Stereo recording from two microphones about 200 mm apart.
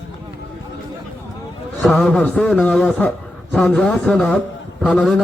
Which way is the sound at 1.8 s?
5° left (ahead or behind).